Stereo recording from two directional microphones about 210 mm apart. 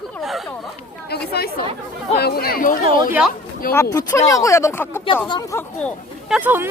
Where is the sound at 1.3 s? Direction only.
50° left (ahead or behind).